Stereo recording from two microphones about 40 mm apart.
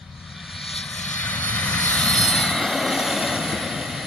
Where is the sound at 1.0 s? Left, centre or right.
Left.